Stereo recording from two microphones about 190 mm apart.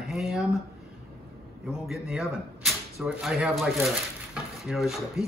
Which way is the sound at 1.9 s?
Centre (ahead or behind).